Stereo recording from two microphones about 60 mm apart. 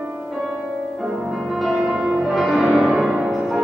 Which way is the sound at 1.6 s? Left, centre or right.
Centre.